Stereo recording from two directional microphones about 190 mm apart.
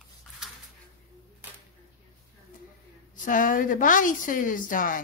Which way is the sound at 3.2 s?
45° left (ahead or behind).